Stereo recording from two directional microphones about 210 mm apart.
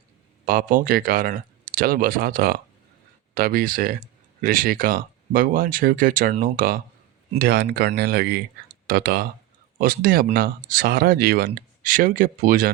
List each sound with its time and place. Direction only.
0.4 s speech: 40° right (ahead or behind)